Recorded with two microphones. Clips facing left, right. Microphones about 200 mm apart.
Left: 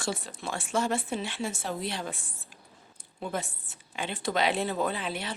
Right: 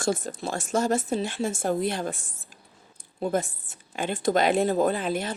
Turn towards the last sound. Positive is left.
turn(degrees=-45)  # may be behind; listen again after turning